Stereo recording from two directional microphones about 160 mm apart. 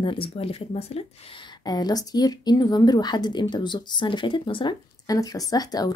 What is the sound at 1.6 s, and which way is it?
A woman's voice, 25° left (ahead or behind).